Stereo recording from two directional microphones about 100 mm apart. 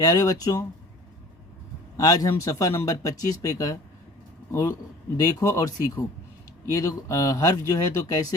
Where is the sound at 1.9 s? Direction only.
35° left (ahead or behind).